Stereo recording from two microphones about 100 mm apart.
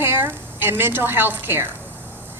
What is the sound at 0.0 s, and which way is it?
A woman's voice, 20° right (ahead or behind).